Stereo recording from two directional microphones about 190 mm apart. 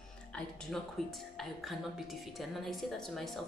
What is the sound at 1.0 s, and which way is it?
A woman's voice, centre (ahead or behind).